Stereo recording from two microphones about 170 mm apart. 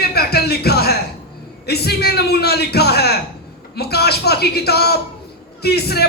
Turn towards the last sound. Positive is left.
turn(degrees=70)  # may be behind; listen again after turning